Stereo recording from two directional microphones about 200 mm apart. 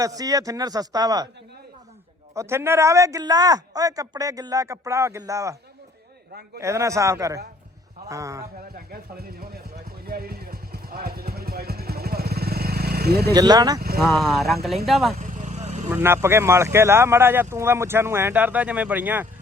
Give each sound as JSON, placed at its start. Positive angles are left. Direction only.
{"t": 0.0, "sound": "a man's voice", "side_deg": -15}
{"t": 2.3, "sound": "speech", "side_deg": -15}
{"t": 6.6, "sound": "speech", "side_deg": -15}
{"t": 8.7, "sound": "a sound", "side_deg": -50}
{"t": 13.3, "sound": "a man's voice", "side_deg": -20}
{"t": 14.0, "sound": "speech", "side_deg": 0}
{"t": 15.2, "sound": "vehicle", "side_deg": -40}
{"t": 15.9, "sound": "speech", "side_deg": -10}